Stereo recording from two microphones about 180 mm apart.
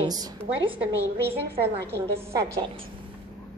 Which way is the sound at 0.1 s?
20° right (ahead or behind).